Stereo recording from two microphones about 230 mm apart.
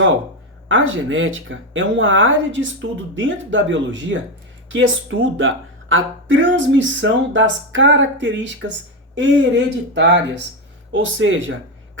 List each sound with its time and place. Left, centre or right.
0.7 s speech: right